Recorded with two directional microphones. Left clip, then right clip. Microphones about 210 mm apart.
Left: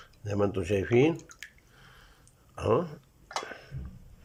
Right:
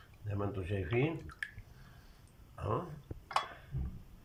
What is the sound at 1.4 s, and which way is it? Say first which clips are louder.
Drip: right 4 dB; 10° left (ahead or behind).